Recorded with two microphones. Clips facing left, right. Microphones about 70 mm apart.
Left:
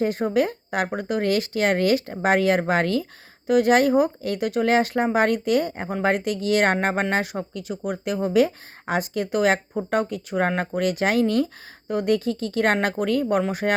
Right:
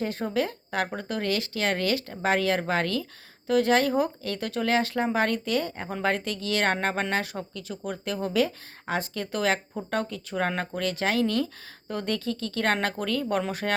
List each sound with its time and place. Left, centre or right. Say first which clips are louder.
0.2 s speech: left 6 dB; left
1.2 s speech: left 6 dB; left
11.9 s speech: left 7 dB; centre